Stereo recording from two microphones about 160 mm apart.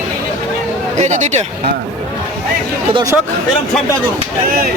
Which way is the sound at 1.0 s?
45° right (ahead or behind).